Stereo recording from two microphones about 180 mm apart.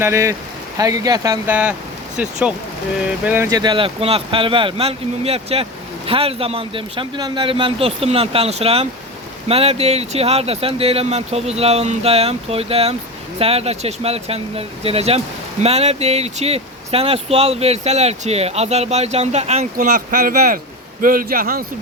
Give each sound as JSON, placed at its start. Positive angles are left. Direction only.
{"t": 0.0, "sound": "speech", "side_deg": -15}
{"t": 3.2, "sound": "speech", "side_deg": -10}
{"t": 3.6, "sound": "a man's voice", "side_deg": -25}